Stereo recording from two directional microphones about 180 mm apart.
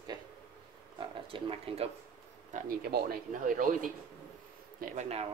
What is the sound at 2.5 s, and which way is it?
Speech, 55° right (ahead or behind).